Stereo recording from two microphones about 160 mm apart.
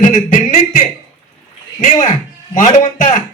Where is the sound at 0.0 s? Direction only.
50° left (ahead or behind).